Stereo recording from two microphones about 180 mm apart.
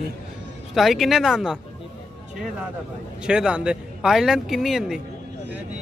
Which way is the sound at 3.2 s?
5° right (ahead or behind).